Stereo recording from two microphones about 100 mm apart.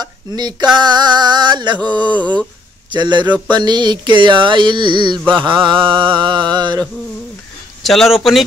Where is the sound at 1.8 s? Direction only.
15° left (ahead or behind).